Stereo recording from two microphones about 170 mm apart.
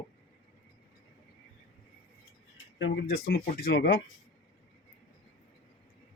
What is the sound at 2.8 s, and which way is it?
Speech, 80° left.